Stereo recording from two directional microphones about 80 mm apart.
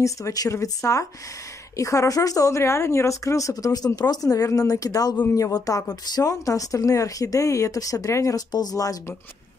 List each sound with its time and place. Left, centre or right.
0.0 s speech: left
8.5 s speech: left